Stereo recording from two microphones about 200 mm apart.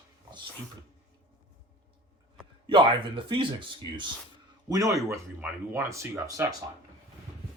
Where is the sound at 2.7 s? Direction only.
25° right (ahead or behind).